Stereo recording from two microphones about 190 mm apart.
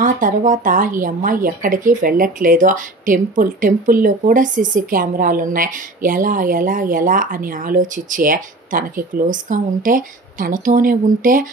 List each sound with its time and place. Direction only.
0.0 s speech: 45° right (ahead or behind)